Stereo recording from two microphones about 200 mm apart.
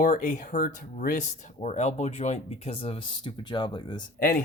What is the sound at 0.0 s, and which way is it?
Speech, 40° left (ahead or behind).